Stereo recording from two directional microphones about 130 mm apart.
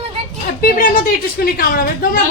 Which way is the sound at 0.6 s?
90° left.